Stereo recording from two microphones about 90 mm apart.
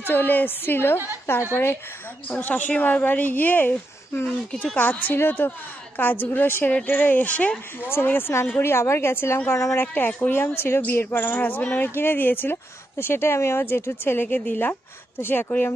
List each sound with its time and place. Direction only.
0.0 s speech: 25° left (ahead or behind)
8.7 s speech: 30° left (ahead or behind)
9.9 s speech: 20° left (ahead or behind)